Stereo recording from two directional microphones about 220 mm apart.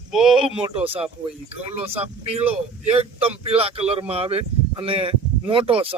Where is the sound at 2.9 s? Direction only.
25° right (ahead or behind).